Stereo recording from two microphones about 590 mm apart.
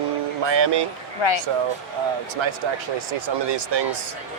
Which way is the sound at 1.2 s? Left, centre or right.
Left.